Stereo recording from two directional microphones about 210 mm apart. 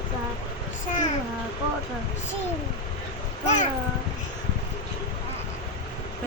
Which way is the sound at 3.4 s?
35° left (ahead or behind).